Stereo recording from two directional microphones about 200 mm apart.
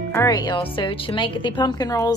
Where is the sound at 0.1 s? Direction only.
15° left (ahead or behind).